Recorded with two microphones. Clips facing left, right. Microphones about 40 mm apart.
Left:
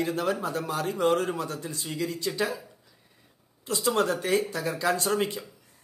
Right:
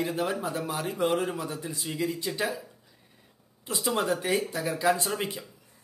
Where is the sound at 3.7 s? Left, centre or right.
Right.